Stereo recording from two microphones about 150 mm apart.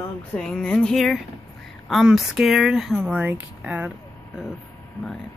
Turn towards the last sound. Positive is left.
turn(degrees=-10)  # may be behind; listen again after turning